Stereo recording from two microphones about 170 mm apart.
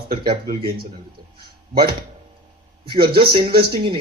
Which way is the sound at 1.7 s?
65° right (ahead or behind).